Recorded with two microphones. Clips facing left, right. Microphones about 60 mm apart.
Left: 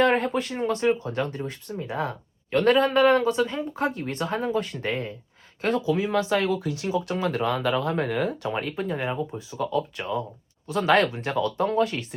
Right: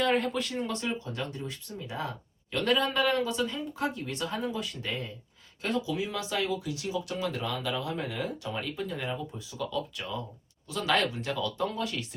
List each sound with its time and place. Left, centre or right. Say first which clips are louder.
0.2 s speech: left 5 dB; left
0.9 s speech: left 10 dB; left